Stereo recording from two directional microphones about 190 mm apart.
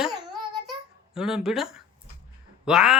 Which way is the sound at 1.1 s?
5° right (ahead or behind).